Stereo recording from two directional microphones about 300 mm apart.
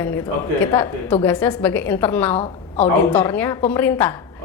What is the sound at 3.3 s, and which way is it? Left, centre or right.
Speech, centre.